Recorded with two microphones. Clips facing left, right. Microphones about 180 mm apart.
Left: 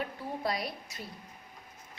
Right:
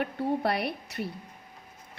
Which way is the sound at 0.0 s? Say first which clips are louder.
Right 7 dB; 65° right (ahead or behind).